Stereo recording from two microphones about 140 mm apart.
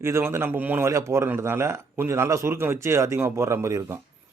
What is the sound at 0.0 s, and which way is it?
A man's voice, 20° right (ahead or behind).